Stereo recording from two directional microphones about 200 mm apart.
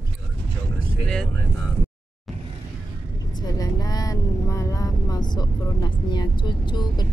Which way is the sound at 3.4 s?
20° left (ahead or behind).